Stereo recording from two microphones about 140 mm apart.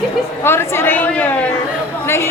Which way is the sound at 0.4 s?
15° left (ahead or behind).